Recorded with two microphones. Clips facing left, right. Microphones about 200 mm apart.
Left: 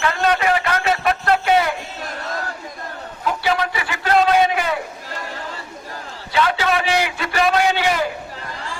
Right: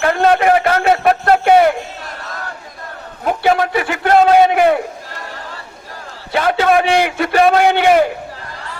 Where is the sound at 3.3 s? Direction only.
50° right (ahead or behind).